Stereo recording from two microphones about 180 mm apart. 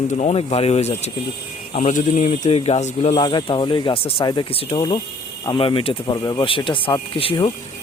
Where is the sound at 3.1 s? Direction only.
25° left (ahead or behind).